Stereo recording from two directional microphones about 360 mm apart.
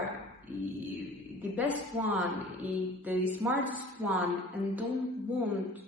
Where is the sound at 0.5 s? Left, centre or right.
Centre.